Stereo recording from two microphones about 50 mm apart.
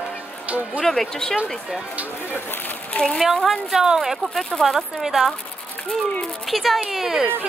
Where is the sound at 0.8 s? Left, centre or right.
Centre.